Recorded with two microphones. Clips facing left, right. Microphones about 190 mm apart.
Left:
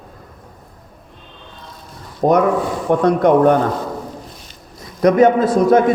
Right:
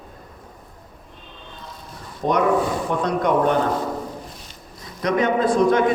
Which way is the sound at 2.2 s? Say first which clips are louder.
Left 4 dB; 50° left (ahead or behind).